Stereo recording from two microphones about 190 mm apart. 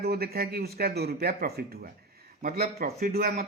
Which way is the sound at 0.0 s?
55° right (ahead or behind).